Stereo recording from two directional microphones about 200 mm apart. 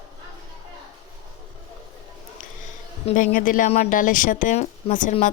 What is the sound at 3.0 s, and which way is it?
A woman's voice, 40° left (ahead or behind).